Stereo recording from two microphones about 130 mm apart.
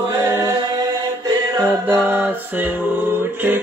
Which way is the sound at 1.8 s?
20° right (ahead or behind).